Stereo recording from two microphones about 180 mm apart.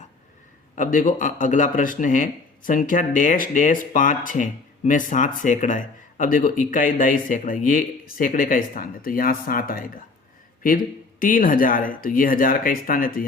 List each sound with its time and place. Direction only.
0.8 s speech: 45° left (ahead or behind)
11.2 s speech: 50° left (ahead or behind)